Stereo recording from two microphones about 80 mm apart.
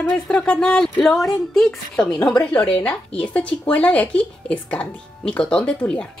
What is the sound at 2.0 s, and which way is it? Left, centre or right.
Speech, centre.